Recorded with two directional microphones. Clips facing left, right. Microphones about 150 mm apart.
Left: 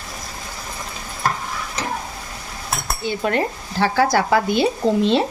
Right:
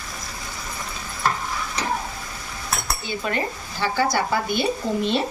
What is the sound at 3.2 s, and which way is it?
Speech, 75° left (ahead or behind).